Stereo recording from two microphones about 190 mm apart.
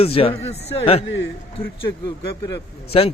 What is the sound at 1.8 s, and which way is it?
Speech, 20° left (ahead or behind).